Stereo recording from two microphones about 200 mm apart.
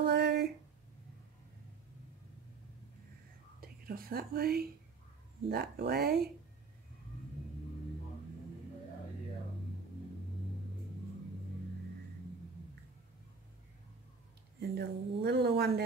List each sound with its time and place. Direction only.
0.0 s a sound: 55° right (ahead or behind)
3.6 s speech: 50° right (ahead or behind)
14.8 s speech: 55° right (ahead or behind)